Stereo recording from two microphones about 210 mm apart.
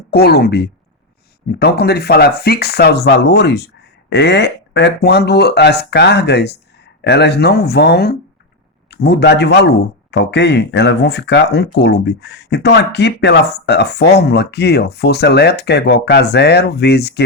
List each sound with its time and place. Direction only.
0.1 s speech: 50° left (ahead or behind)